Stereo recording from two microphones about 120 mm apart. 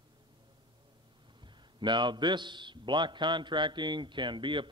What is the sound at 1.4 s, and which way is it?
A man's voice, 40° right (ahead or behind).